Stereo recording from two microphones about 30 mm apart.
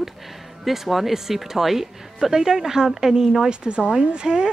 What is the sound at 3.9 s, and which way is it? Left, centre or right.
Speech, right.